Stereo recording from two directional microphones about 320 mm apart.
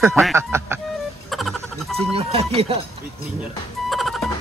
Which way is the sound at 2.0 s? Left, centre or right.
Centre.